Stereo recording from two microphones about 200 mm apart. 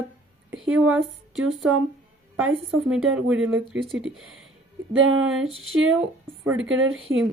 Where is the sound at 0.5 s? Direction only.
85° right.